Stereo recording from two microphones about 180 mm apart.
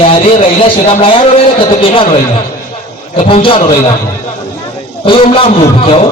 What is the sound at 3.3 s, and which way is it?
Speech, 30° left (ahead or behind).